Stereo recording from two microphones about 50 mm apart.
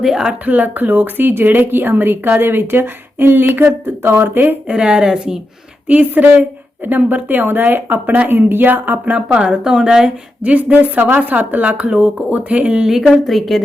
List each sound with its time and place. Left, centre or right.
0.0 s a woman's voice: centre
0.4 s speech: right
4.7 s a woman's voice: centre
5.9 s speech: right
9.1 s a woman's voice: centre
10.4 s speech: right
12.9 s a woman's voice: centre